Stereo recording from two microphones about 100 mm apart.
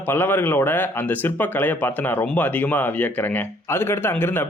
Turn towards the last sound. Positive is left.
turn(degrees=20)  # may be behind; listen again after turning